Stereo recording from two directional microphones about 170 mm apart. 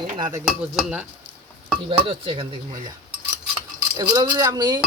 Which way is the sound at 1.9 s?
35° right (ahead or behind).